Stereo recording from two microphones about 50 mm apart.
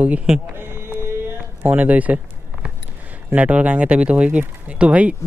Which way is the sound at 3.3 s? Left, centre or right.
Right.